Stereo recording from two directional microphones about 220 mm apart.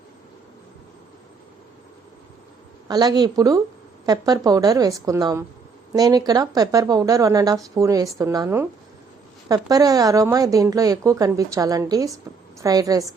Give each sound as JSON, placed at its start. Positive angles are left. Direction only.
{"t": 2.8, "sound": "a woman's voice", "side_deg": -15}